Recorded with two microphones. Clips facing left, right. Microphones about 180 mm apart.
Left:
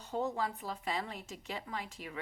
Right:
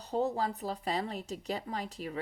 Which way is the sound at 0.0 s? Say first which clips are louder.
Right 4 dB; 35° right (ahead or behind).